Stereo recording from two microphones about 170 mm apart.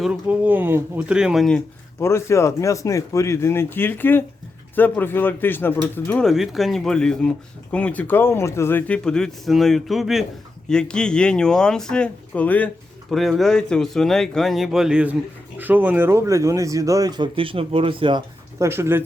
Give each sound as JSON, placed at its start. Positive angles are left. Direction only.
{"t": 0.0, "sound": "speech", "side_deg": -5}
{"t": 2.0, "sound": "speech", "side_deg": 15}
{"t": 6.2, "sound": "speech", "side_deg": 0}
{"t": 18.6, "sound": "speech", "side_deg": -15}